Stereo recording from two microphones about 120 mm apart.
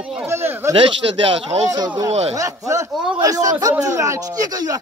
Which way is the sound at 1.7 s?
35° right (ahead or behind).